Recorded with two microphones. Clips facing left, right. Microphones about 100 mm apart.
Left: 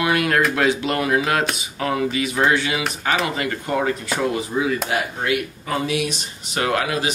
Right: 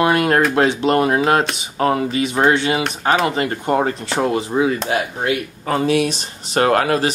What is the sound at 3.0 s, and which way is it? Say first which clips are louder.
Speech: right 5 dB; 35° right (ahead or behind).